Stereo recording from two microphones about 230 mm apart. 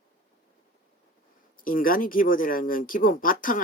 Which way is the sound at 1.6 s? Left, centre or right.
Left.